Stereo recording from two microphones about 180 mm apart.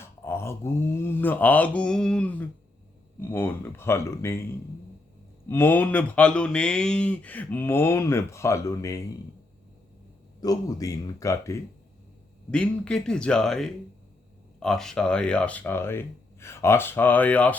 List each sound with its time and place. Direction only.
0.0 s speech: 15° left (ahead or behind)
5.5 s speech: 10° left (ahead or behind)
10.4 s speech: 20° left (ahead or behind)
12.5 s speech: 5° left (ahead or behind)